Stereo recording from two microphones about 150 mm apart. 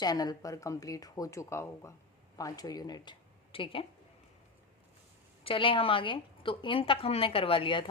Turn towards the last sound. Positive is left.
turn(degrees=35)  # may be behind; listen again after turning